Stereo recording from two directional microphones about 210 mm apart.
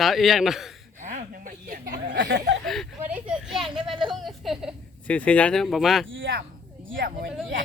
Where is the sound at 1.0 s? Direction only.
35° right (ahead or behind).